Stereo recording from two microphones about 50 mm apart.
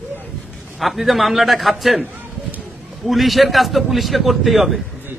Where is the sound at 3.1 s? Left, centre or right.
Centre.